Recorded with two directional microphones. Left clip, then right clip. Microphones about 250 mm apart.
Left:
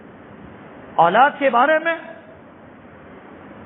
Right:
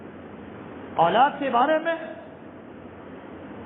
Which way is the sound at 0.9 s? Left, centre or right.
Left.